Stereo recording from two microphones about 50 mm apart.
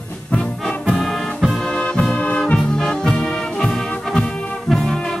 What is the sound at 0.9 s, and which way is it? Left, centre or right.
Music, centre.